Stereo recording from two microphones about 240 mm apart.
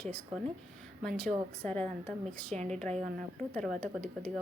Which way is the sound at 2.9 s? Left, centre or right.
Right.